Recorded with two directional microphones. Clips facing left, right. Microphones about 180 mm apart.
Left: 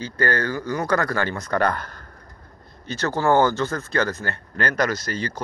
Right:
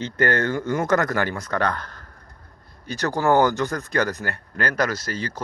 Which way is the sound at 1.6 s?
5° left (ahead or behind).